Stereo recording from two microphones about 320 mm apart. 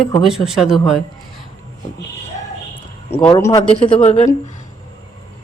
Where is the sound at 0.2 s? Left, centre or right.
Centre.